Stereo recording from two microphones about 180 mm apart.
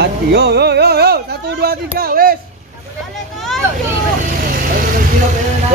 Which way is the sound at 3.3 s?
Centre (ahead or behind).